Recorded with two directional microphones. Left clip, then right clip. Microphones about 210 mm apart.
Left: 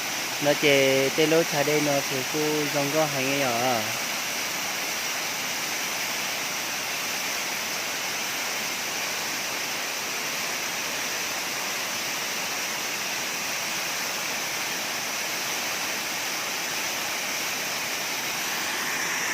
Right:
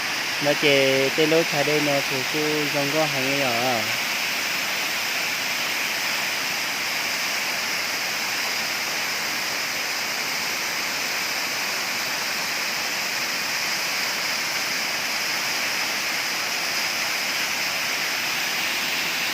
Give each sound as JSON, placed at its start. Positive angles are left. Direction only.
{"t": 0.4, "sound": "speech", "side_deg": 0}